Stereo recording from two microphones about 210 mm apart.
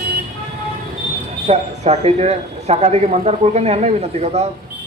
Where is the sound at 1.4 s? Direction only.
30° right (ahead or behind).